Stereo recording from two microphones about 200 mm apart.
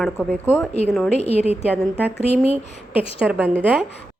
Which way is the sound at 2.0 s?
10° right (ahead or behind).